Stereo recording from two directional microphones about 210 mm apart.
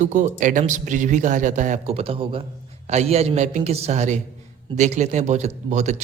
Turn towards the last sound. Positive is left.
turn(degrees=-35)  # may be behind; listen again after turning